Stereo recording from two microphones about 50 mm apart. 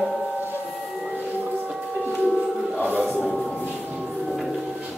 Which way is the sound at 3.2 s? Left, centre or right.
Centre.